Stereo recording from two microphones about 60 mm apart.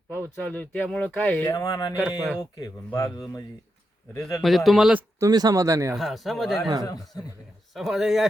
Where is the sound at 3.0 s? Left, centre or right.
Left.